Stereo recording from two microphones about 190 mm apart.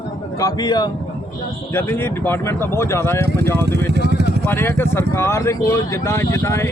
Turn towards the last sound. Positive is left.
turn(degrees=15)  # may be behind; listen again after turning